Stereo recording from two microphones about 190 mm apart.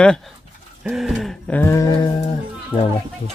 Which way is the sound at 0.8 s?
Centre (ahead or behind).